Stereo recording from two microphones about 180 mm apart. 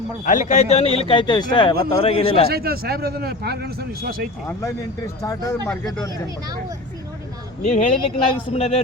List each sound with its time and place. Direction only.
0.3 s a man's voice: 45° left (ahead or behind)
2.5 s a man's voice: 60° right (ahead or behind)
5.2 s speech: 20° left (ahead or behind)
7.6 s a man's voice: 40° left (ahead or behind)